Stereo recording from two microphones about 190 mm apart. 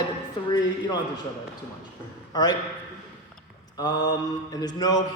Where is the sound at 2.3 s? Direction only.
20° left (ahead or behind).